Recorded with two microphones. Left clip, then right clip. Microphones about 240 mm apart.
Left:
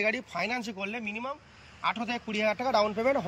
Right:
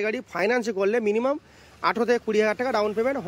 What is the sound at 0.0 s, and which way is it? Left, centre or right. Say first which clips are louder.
Speech: right 4 dB; centre.